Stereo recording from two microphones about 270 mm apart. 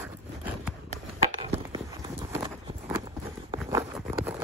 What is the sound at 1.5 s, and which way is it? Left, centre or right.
Clip-clop, centre.